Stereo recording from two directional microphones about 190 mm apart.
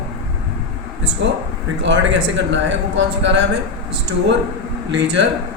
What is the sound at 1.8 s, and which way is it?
A man's voice, 70° right (ahead or behind).